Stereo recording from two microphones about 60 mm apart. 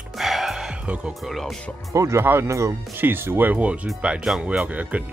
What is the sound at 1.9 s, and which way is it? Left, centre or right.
Speech, right.